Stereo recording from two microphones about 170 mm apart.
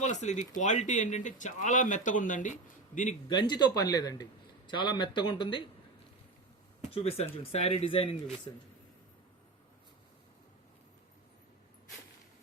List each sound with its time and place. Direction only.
0.0 s speech: 45° left (ahead or behind)
3.2 s a man's voice: 25° left (ahead or behind)
6.9 s speech: 35° left (ahead or behind)